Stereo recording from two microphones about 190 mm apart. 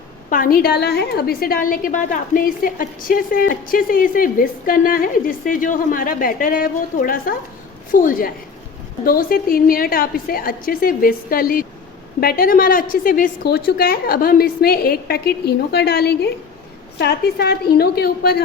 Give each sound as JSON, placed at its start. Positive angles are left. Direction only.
{"t": 0.3, "sound": "a woman's voice", "side_deg": 45}